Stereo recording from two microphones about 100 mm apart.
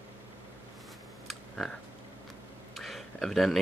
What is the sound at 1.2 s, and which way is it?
Computer keyboard, centre (ahead or behind).